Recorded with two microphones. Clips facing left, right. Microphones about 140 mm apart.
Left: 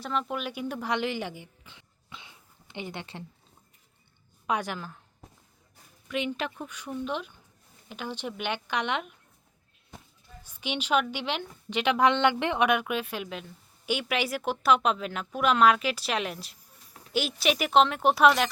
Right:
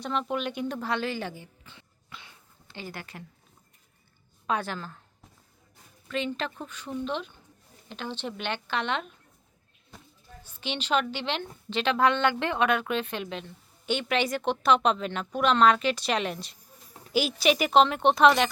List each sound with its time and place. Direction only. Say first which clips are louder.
0.0 s a woman's voice: right 2 dB; centre (ahead or behind); by 3.2 s 25° left (ahead or behind)
4.4 s speech: even; 15° left (ahead or behind)
6.1 s speech: even; 15° left (ahead or behind)
10.4 s a woman's voice: left 1 dB; 10° left (ahead or behind)